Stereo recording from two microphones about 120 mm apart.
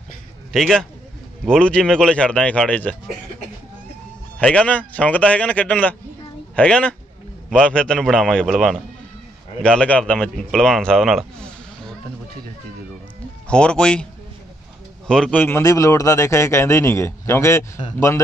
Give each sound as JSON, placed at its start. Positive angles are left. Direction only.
{"t": 0.5, "sound": "a man's voice", "side_deg": 5}
{"t": 4.4, "sound": "a man's voice", "side_deg": 10}
{"t": 13.5, "sound": "a man's voice", "side_deg": 10}
{"t": 15.0, "sound": "a man's voice", "side_deg": 5}
{"t": 15.4, "sound": "a man's voice", "side_deg": 25}